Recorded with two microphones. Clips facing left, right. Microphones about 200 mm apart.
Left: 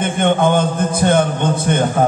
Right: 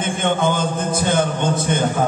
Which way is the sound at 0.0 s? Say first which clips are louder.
Left 4 dB; 60° left (ahead or behind).